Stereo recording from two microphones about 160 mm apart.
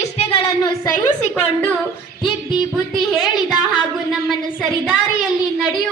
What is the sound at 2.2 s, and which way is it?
Music, centre (ahead or behind).